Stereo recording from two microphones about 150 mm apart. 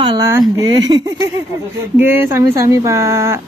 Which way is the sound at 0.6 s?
30° right (ahead or behind).